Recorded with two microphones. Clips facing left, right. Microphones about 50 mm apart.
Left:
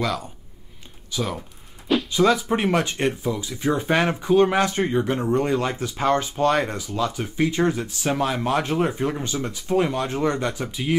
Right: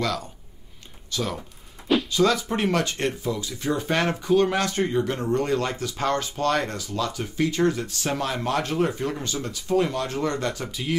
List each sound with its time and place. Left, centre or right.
0.0 s speech: centre